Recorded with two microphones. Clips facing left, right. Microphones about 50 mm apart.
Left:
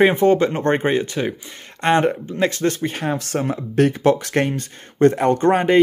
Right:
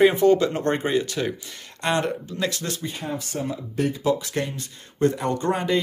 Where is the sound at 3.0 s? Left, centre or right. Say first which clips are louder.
Left 6 dB; left.